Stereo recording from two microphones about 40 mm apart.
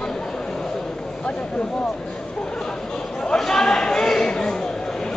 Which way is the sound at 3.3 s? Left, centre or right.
Centre.